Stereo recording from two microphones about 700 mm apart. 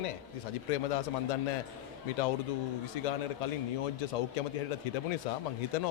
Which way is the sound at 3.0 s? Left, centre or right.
Left.